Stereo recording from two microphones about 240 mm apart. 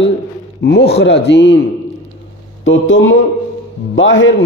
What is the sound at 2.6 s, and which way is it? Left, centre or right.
A man's voice, left.